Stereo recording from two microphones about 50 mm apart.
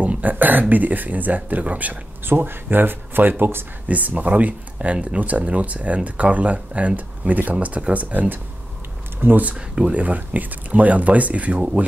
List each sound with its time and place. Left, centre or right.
0.0 s speech: right
2.2 s speech: right
3.8 s speech: right